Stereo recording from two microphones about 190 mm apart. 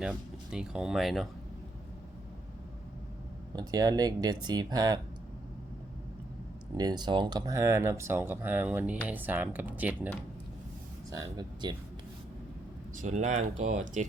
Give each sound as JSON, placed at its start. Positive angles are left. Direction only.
{"t": 0.0, "sound": "speech", "side_deg": -5}
{"t": 3.5, "sound": "speech", "side_deg": -20}
{"t": 6.7, "sound": "speech", "side_deg": -20}
{"t": 11.2, "sound": "speech", "side_deg": -20}
{"t": 13.0, "sound": "speech", "side_deg": -40}